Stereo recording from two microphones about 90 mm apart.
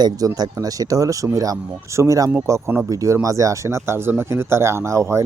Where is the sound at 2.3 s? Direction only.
25° right (ahead or behind).